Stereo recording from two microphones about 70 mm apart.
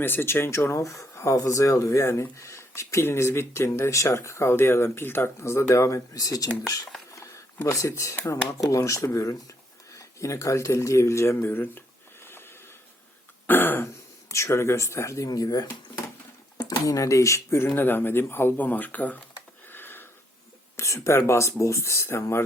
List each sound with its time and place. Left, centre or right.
0.0 s speech: left
7.1 s a sound: left
8.2 s speech: left
11.3 s speech: left
12.2 s a sound: left
13.5 s speech: left
15.3 s speech: left
17.7 s speech: left
19.6 s a sound: left
20.7 s speech: left